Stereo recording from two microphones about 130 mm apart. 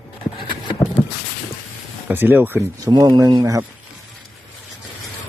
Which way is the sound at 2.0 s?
15° right (ahead or behind).